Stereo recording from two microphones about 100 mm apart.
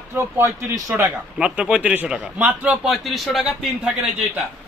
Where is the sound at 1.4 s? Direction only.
10° right (ahead or behind).